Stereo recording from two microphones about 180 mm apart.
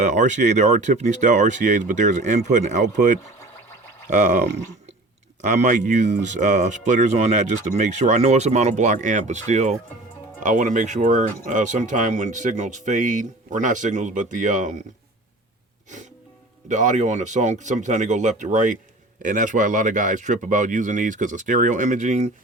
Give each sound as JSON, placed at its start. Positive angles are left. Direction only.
{"t": 0.0, "sound": "speech", "side_deg": -40}
{"t": 16.6, "sound": "speech", "side_deg": -45}